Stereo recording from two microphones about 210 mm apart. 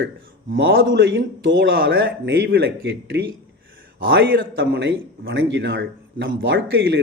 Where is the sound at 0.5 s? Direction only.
50° right (ahead or behind).